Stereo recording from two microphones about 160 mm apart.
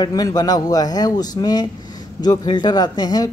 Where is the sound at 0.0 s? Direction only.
25° left (ahead or behind).